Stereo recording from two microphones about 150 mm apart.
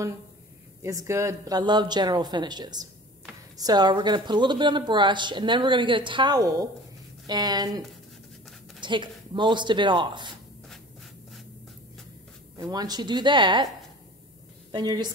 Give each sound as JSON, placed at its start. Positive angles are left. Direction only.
{"t": 0.8, "sound": "a woman's voice", "side_deg": -20}
{"t": 8.8, "sound": "a woman's voice", "side_deg": -30}
{"t": 12.5, "sound": "a woman's voice", "side_deg": -25}
{"t": 14.7, "sound": "a woman's voice", "side_deg": -30}